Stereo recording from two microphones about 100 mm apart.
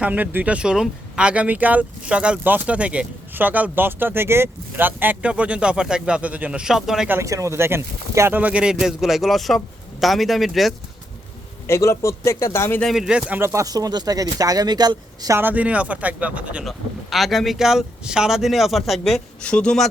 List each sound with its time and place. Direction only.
0.0 s speech: 15° right (ahead or behind)
7.1 s speech: 30° right (ahead or behind)
8.4 s speech: 15° right (ahead or behind)
11.6 s a man's voice: 30° left (ahead or behind)
12.8 s speech: 5° right (ahead or behind)
13.4 s speech: 30° right (ahead or behind)
15.4 s speech: 20° right (ahead or behind)
16.6 s speech: centre (ahead or behind)